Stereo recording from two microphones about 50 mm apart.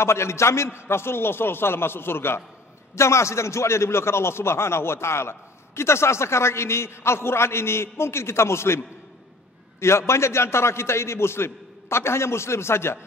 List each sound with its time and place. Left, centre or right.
0.0 s a man's voice: left
3.0 s a man's voice: left